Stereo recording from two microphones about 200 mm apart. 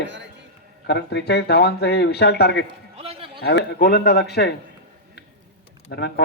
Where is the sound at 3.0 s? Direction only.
30° right (ahead or behind).